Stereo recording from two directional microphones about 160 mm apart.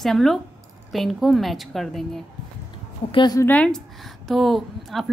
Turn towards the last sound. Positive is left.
turn(degrees=0)  # may be behind; listen again after turning